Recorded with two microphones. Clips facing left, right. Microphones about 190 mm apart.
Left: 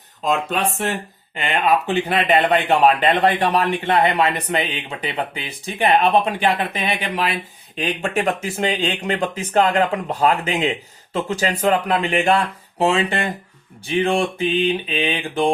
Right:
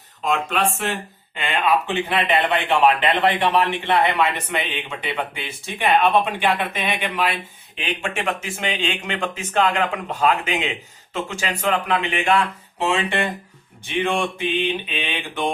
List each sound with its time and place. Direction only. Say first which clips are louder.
1.6 s a man's voice: left 2 dB; 40° left (ahead or behind)